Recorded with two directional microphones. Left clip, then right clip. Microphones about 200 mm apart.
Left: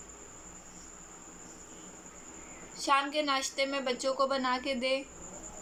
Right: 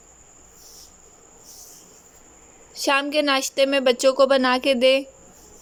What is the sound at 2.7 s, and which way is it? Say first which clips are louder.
A woman's voice: right 8 dB; 50° right (ahead or behind).